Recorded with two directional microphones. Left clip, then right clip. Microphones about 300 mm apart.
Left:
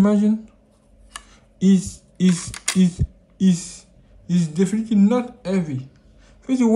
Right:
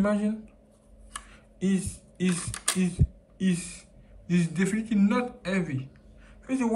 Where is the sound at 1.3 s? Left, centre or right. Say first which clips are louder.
Left 10 dB; left.